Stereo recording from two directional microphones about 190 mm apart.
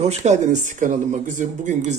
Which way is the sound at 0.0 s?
35° right (ahead or behind).